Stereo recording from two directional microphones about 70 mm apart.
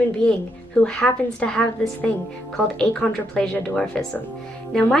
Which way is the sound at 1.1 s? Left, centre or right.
Left.